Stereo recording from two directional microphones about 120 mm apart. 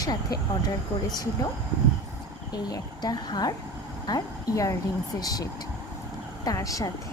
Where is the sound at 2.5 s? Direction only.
35° left (ahead or behind).